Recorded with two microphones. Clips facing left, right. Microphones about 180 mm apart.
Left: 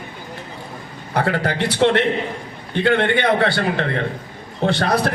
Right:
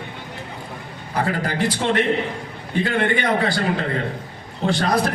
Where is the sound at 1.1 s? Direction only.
65° left (ahead or behind).